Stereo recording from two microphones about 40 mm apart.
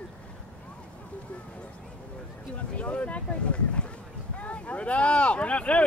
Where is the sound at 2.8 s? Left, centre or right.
Left.